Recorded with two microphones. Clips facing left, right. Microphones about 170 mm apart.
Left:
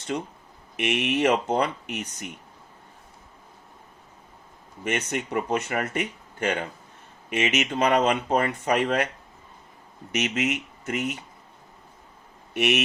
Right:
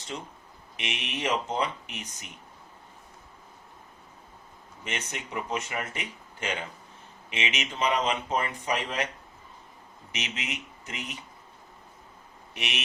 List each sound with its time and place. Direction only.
0.1 s speech: 55° left (ahead or behind)
4.8 s speech: 55° left (ahead or behind)
10.3 s speech: 55° left (ahead or behind)
12.5 s speech: 55° left (ahead or behind)